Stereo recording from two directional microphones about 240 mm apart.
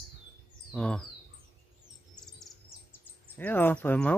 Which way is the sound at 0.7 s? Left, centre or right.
Centre.